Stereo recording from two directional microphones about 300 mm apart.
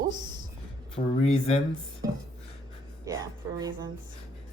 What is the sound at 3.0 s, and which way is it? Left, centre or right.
Speech, centre.